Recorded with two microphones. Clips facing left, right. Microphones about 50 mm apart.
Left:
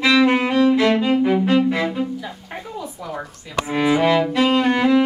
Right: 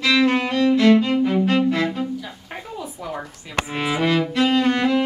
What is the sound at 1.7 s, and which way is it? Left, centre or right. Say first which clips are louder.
Cello: left 1 dB; centre.